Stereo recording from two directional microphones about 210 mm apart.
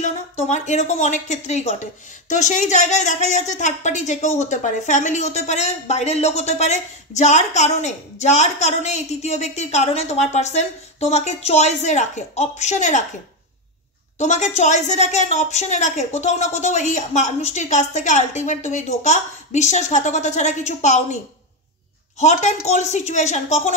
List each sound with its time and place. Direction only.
0.0 s speech: 35° left (ahead or behind)
14.1 s speech: 35° left (ahead or behind)
22.2 s speech: 35° left (ahead or behind)